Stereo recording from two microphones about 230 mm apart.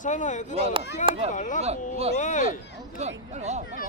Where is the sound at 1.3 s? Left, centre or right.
Left.